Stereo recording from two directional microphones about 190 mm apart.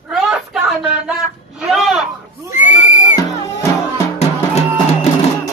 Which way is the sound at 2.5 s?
40° left (ahead or behind).